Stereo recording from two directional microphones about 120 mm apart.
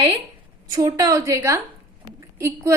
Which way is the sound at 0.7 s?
30° right (ahead or behind).